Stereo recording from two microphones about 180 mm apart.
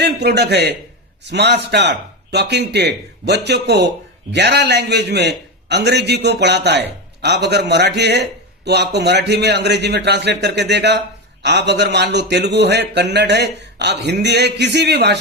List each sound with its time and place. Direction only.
0.0 s speech: 65° right (ahead or behind)